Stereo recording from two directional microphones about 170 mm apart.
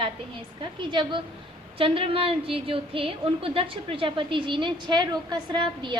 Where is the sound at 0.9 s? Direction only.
30° right (ahead or behind).